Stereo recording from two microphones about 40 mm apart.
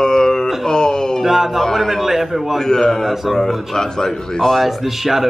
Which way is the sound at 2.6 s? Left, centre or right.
Centre.